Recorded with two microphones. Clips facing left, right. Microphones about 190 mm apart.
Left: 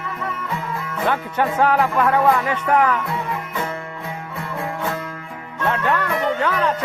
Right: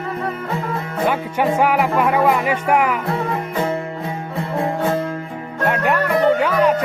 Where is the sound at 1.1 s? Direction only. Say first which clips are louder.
Right 2 dB; 15° right (ahead or behind).